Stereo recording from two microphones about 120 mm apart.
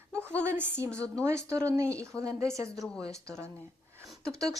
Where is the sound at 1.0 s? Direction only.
25° right (ahead or behind).